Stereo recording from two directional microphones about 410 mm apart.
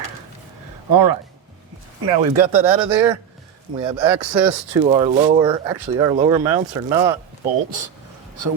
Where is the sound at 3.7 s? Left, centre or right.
Centre.